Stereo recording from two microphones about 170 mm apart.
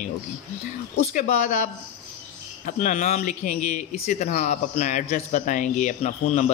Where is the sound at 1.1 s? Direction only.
45° left (ahead or behind).